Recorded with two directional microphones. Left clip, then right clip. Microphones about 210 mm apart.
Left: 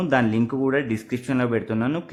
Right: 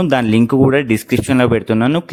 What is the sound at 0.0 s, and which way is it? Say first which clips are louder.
Speech: right 7 dB; 40° right (ahead or behind).